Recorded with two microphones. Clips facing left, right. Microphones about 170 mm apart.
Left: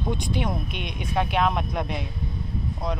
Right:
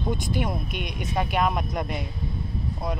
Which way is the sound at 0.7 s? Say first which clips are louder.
Right 1 dB; 45° right (ahead or behind).